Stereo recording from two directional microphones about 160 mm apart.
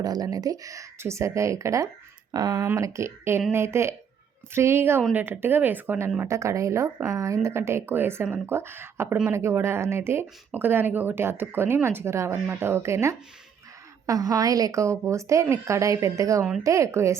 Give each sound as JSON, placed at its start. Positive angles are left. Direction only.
{"t": 0.0, "sound": "a woman's voice", "side_deg": -25}